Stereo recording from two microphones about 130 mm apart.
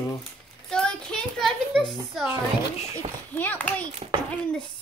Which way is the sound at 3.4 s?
15° left (ahead or behind).